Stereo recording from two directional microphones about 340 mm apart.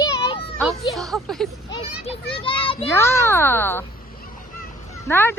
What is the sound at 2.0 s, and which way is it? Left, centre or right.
A child's voice, centre.